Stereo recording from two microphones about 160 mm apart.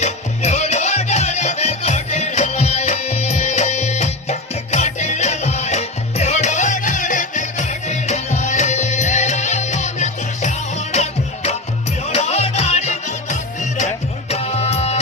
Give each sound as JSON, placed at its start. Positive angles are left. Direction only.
{"t": 0.0, "sound": "music", "side_deg": 45}